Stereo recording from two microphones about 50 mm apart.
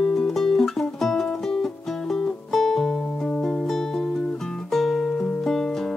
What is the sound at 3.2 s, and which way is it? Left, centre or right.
Music, centre.